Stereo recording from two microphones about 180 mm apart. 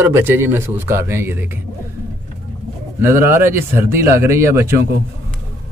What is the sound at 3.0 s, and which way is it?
Speech, 15° right (ahead or behind).